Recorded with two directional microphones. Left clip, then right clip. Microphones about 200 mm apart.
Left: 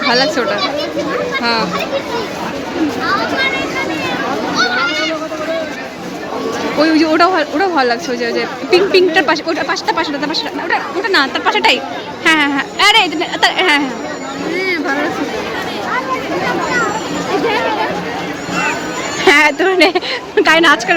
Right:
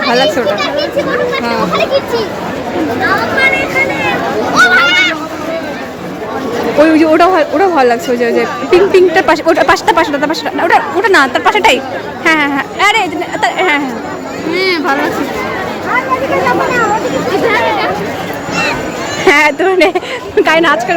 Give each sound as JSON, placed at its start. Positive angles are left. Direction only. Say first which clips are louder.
{"t": 0.1, "sound": "a man's voice", "louder": "right 3 dB", "side_deg": 0}
{"t": 4.5, "sound": "a sound", "louder": "right 9 dB", "side_deg": -45}
{"t": 6.8, "sound": "a man's voice", "louder": "right 3 dB", "side_deg": -5}
{"t": 19.2, "sound": "a man's voice", "louder": "right 2 dB", "side_deg": 0}